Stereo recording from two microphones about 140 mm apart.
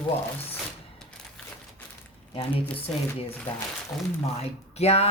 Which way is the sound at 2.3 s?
40° left (ahead or behind).